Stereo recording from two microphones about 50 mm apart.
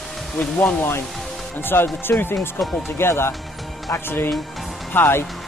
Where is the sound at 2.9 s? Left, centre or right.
Left.